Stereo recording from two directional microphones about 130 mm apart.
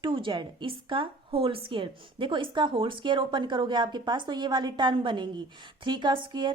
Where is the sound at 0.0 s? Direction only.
40° right (ahead or behind).